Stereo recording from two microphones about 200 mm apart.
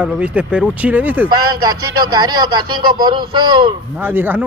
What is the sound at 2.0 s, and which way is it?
A man's voice, 20° right (ahead or behind).